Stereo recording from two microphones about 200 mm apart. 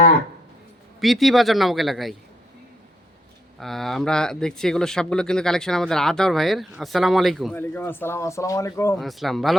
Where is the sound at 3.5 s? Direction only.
Centre (ahead or behind).